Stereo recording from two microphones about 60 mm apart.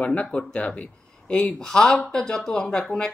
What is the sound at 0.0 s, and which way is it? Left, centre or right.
Speech, left.